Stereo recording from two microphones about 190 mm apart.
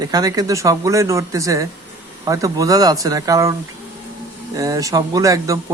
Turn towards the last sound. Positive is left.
turn(degrees=-15)  # may be behind; listen again after turning